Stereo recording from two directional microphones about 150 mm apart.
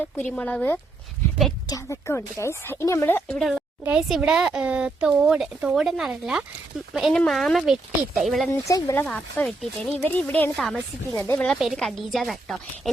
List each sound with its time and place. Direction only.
0.0 s a woman's voice: 10° left (ahead or behind)
1.6 s a woman's voice: 20° left (ahead or behind)
3.3 s speech: centre (ahead or behind)
8.6 s speech: 20° left (ahead or behind)
9.0 s a woman's voice: 5° left (ahead or behind)